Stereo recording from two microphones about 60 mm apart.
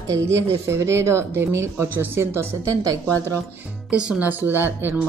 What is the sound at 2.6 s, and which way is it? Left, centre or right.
Speech, right.